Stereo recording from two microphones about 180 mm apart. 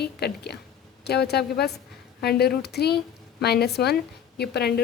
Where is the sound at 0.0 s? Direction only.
65° left (ahead or behind).